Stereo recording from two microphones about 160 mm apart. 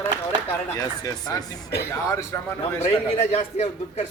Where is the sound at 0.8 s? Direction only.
20° left (ahead or behind).